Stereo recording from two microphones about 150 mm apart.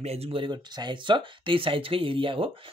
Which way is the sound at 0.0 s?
45° right (ahead or behind).